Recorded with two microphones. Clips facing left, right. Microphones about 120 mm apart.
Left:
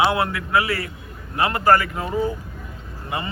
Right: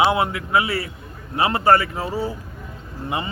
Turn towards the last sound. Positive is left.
turn(degrees=-25)  # may be behind; listen again after turning